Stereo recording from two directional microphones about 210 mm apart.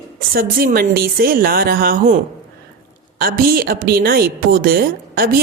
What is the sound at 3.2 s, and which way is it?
A woman's voice, 45° right (ahead or behind).